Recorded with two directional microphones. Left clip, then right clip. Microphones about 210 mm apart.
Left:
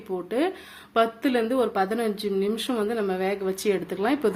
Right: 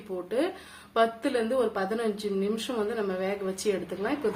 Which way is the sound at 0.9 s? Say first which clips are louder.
Left 3 dB; 35° left (ahead or behind).